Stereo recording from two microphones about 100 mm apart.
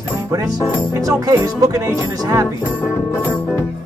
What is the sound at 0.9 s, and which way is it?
Speech, 30° right (ahead or behind).